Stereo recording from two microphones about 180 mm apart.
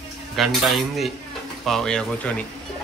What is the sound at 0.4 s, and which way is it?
A man's voice, centre (ahead or behind).